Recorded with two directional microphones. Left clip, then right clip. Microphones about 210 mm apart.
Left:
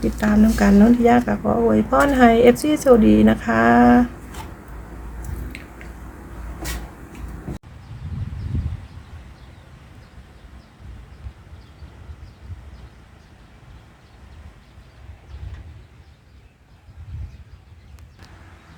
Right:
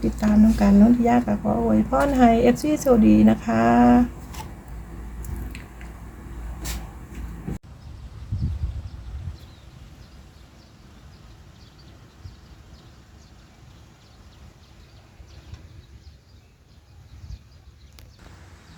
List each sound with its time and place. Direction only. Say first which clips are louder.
0.2 s speech: left 2 dB; 10° left (ahead or behind)